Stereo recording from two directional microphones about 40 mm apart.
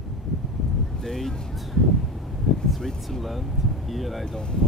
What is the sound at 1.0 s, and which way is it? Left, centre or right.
Speech, centre.